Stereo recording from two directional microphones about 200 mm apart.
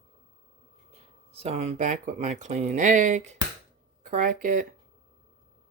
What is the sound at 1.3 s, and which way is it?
Speech, 30° right (ahead or behind).